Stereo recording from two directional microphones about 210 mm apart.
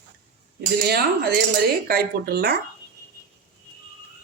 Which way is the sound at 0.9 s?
50° right (ahead or behind).